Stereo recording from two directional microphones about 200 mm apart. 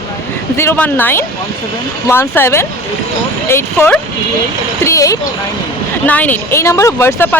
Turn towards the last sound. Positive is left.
turn(degrees=10)  # may be behind; listen again after turning